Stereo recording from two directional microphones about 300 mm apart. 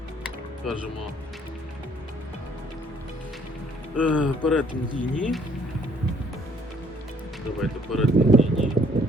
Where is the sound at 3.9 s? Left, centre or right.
Centre.